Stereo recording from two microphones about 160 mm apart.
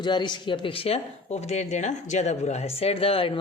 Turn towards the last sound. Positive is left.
turn(degrees=35)  # may be behind; listen again after turning